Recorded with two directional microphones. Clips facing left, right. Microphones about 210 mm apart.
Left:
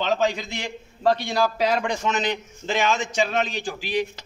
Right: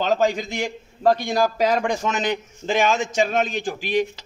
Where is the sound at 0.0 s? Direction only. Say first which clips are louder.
Right 3 dB; 45° right (ahead or behind).